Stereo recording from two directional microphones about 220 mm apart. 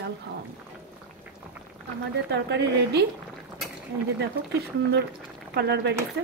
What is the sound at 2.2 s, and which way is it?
Speech, 50° right (ahead or behind).